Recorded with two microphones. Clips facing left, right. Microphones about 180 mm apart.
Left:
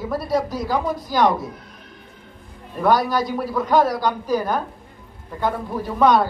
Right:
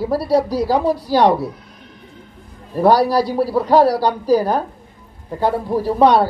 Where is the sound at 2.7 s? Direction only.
35° right (ahead or behind).